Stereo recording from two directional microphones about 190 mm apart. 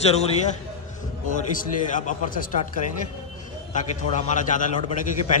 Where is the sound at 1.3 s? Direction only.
40° left (ahead or behind).